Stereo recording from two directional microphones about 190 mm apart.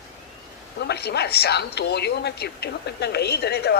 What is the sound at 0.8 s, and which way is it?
A woman's voice, 60° left (ahead or behind).